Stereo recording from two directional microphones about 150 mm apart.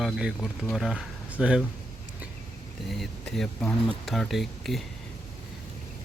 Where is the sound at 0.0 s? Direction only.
Centre (ahead or behind).